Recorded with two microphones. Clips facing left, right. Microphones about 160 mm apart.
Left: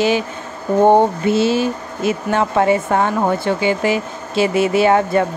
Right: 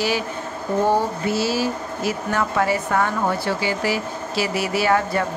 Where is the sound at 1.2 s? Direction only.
25° left (ahead or behind).